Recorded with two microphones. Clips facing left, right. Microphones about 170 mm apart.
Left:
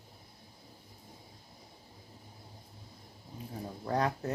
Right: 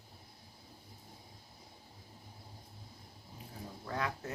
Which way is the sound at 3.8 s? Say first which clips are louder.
Left 7 dB; 40° left (ahead or behind).